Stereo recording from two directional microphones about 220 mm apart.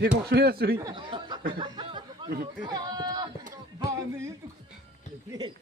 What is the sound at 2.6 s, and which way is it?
Speech, 20° right (ahead or behind).